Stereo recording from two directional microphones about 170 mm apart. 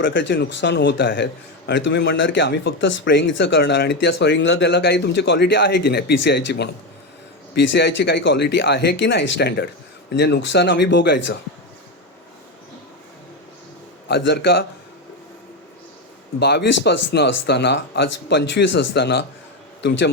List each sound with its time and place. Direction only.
0.0 s a man's voice: 90° left
14.1 s speech: 80° left
16.4 s a man's voice: 80° left